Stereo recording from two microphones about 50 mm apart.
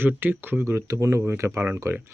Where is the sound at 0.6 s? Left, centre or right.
Right.